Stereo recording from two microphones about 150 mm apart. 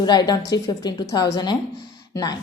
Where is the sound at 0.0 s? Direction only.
30° left (ahead or behind).